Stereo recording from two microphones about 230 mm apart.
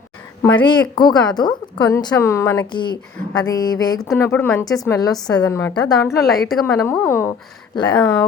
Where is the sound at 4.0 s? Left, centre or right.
Centre.